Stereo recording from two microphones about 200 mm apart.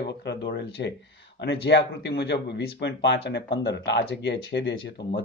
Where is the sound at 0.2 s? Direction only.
60° left (ahead or behind).